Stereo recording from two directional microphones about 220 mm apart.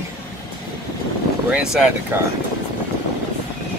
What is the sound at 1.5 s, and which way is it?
Speech, 5° right (ahead or behind).